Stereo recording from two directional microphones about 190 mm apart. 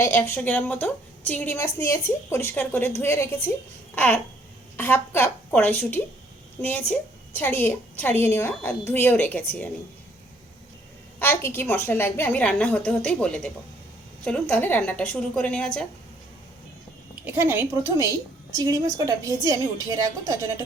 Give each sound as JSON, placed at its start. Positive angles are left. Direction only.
{"t": 0.0, "sound": "a woman's voice", "side_deg": 15}
{"t": 3.9, "sound": "babbling", "side_deg": 5}
{"t": 4.8, "sound": "a woman's voice", "side_deg": 10}
{"t": 11.2, "sound": "a sound", "side_deg": 10}
{"t": 11.6, "sound": "a woman's voice", "side_deg": 10}
{"t": 17.2, "sound": "a woman's voice", "side_deg": -10}